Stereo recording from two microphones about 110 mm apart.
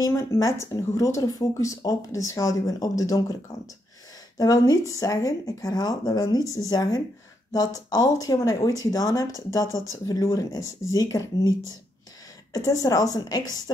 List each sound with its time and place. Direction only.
0.0 s speech: 25° left (ahead or behind)
4.4 s speech: 35° left (ahead or behind)
12.5 s speech: 30° left (ahead or behind)